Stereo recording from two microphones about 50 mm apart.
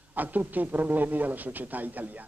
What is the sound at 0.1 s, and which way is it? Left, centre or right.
Speech, right.